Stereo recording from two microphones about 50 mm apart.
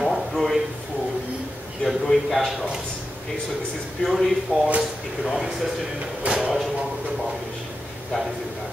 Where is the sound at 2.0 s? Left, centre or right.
Centre.